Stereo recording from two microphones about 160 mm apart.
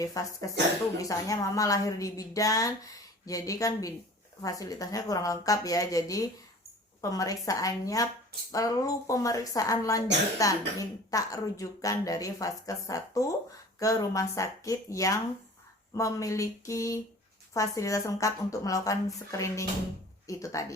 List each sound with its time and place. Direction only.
0.0 s a woman's voice: 20° left (ahead or behind)